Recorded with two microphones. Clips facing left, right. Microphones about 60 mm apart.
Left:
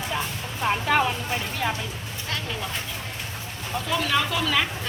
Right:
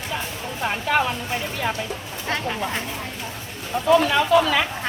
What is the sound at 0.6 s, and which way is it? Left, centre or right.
Speech, centre.